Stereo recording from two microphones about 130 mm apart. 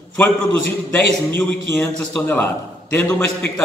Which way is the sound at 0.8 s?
10° left (ahead or behind).